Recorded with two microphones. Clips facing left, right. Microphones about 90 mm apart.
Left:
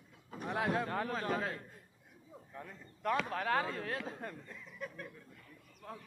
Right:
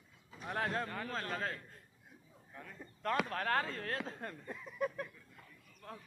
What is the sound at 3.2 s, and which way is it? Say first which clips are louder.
Speech: left 1 dB; 10° left (ahead or behind).